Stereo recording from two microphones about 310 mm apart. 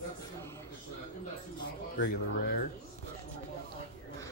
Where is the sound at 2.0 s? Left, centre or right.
Left.